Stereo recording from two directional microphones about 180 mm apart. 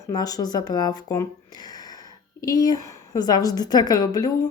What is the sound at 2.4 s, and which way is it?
Speech, 20° left (ahead or behind).